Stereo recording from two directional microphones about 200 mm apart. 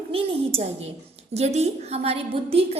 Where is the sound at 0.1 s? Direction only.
30° right (ahead or behind).